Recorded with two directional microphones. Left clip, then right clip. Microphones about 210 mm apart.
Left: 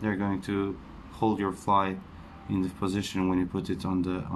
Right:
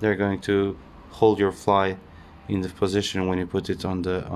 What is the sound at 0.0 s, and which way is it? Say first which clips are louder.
Speech: right 8 dB; 40° right (ahead or behind).